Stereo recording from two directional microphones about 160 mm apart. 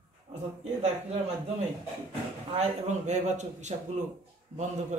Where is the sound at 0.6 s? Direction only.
45° right (ahead or behind).